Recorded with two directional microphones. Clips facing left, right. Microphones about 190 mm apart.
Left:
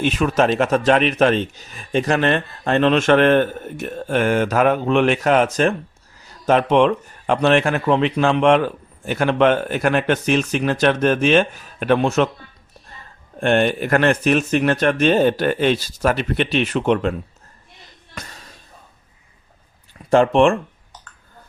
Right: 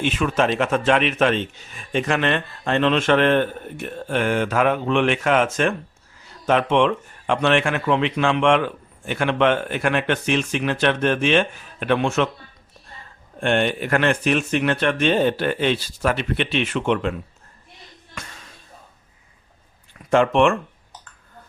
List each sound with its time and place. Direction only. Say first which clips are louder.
0.0 s speech: left 3 dB; 40° left (ahead or behind)
13.4 s speech: left 3 dB; 45° left (ahead or behind)
18.1 s music: left 2 dB; 35° left (ahead or behind)
20.1 s speech: left 3 dB; 35° left (ahead or behind)